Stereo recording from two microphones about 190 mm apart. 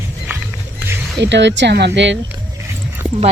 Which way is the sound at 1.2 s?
70° right (ahead or behind).